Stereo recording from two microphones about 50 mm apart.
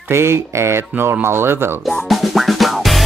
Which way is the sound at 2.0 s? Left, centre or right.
Centre.